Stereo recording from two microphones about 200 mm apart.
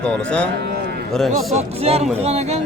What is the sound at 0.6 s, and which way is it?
Cattle, 55° right (ahead or behind).